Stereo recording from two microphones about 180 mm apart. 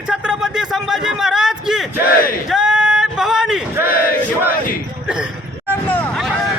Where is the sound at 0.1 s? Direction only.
5° right (ahead or behind).